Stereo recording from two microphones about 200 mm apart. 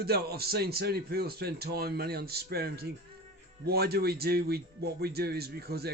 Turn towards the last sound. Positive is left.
turn(degrees=-50)  # may be behind; listen again after turning